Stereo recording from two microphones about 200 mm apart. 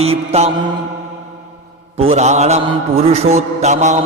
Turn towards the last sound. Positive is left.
turn(degrees=-35)  # may be behind; listen again after turning